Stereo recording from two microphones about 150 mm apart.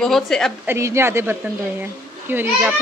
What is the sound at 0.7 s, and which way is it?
A woman's voice, 15° right (ahead or behind).